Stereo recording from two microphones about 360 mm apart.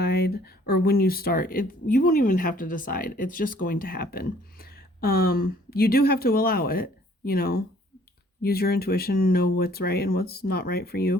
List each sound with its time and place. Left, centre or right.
0.0 s speech: left